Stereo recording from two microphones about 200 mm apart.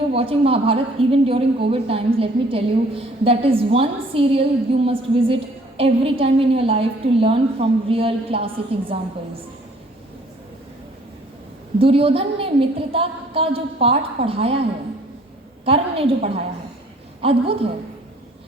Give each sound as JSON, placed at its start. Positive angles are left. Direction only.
{"t": 0.1, "sound": "a woman's voice", "side_deg": -30}
{"t": 11.8, "sound": "a woman's voice", "side_deg": -30}
{"t": 15.6, "sound": "a woman's voice", "side_deg": -30}